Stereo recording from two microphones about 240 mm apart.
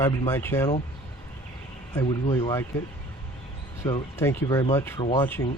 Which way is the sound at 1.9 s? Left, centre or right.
Centre.